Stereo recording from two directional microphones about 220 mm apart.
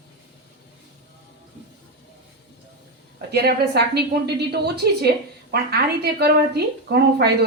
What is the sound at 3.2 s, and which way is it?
A woman's voice, 50° right (ahead or behind).